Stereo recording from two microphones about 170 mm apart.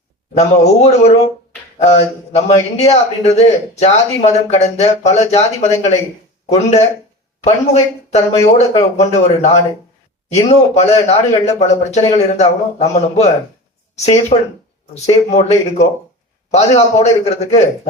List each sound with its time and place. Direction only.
0.3 s a man's voice: 40° left (ahead or behind)
10.8 s a man's voice: 40° left (ahead or behind)